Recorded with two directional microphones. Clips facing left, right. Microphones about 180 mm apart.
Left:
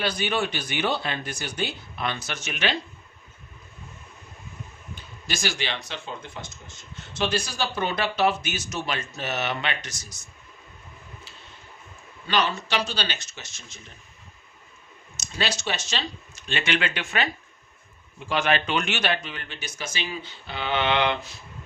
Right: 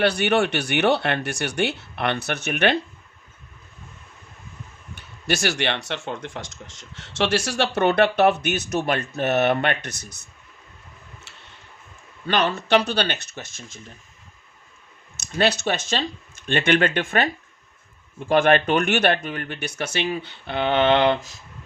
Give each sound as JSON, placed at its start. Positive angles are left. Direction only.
{"t": 0.0, "sound": "speech", "side_deg": -70}
{"t": 5.2, "sound": "speech", "side_deg": -65}
{"t": 11.3, "sound": "a sound", "side_deg": -75}
{"t": 12.3, "sound": "speech", "side_deg": -55}
{"t": 15.4, "sound": "speech", "side_deg": -55}
{"t": 18.3, "sound": "speech", "side_deg": -55}